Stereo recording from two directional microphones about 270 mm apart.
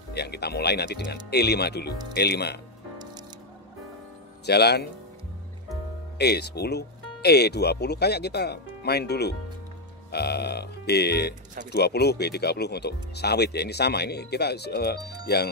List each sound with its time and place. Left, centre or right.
0.1 s speech: left
4.5 s speech: left
6.1 s speech: left